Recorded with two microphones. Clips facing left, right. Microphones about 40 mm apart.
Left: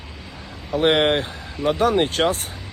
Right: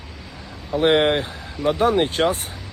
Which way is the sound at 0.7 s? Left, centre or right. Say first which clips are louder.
Right 1 dB; left.